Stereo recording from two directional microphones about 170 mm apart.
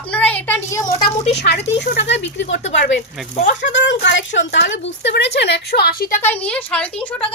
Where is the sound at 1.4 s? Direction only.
75° left (ahead or behind).